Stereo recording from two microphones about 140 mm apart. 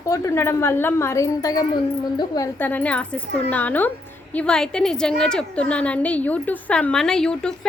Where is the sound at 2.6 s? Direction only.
10° left (ahead or behind).